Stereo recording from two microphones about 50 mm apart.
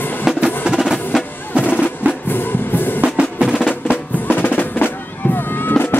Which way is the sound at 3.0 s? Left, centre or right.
Right.